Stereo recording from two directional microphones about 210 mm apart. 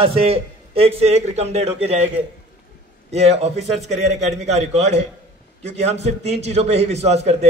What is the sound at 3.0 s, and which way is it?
A man's voice, 30° right (ahead or behind).